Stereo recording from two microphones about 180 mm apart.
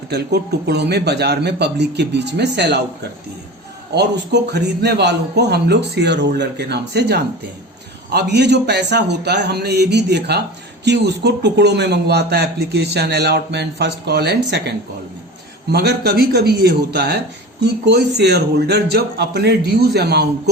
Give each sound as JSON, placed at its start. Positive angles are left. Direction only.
{"t": 0.1, "sound": "a man's voice", "side_deg": -65}
{"t": 15.7, "sound": "a man's voice", "side_deg": -65}